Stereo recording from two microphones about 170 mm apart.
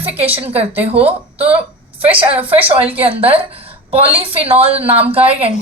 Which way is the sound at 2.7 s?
35° right (ahead or behind).